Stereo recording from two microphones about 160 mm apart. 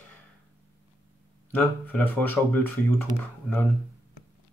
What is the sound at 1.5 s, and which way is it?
Speech, 10° left (ahead or behind).